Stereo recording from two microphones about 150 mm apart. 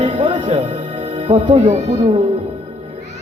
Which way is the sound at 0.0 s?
35° right (ahead or behind).